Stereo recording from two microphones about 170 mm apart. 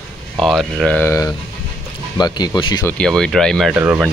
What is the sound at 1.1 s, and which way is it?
Speech, 15° left (ahead or behind).